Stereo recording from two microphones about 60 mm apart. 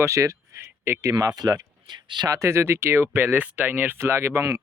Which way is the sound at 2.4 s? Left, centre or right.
Right.